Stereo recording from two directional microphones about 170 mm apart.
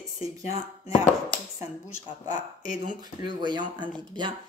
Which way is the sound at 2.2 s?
50° left (ahead or behind).